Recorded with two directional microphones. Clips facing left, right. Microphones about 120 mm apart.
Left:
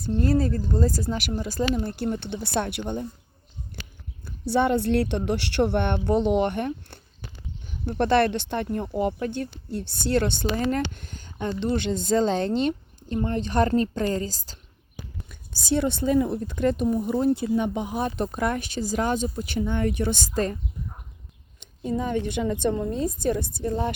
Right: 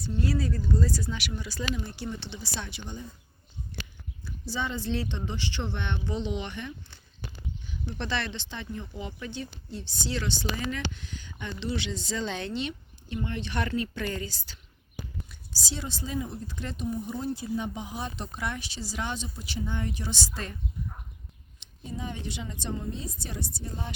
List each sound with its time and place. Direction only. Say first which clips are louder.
0.2 s speech: left 6 dB; 45° left (ahead or behind)
4.3 s speech: left 12 dB; 60° left (ahead or behind); by 14.6 s 40° left (ahead or behind)
15.3 s speech: left 13 dB; 55° left (ahead or behind)
21.6 s a woman's voice: left 10 dB; 50° left (ahead or behind)